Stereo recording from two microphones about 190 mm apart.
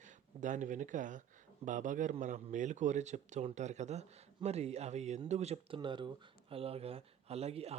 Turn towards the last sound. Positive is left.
turn(degrees=-35)  # may be behind; listen again after turning